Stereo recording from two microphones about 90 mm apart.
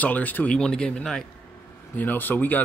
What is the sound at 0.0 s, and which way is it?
Speech, 20° left (ahead or behind).